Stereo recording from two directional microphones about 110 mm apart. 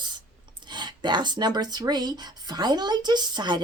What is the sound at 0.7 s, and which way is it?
Speech, 45° right (ahead or behind).